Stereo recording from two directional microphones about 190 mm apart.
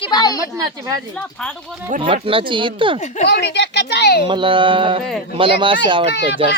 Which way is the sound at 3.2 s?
60° left (ahead or behind).